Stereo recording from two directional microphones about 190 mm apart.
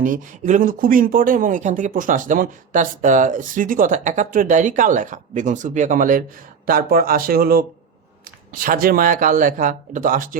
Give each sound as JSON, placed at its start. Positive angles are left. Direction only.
{"t": 0.0, "sound": "speech", "side_deg": -45}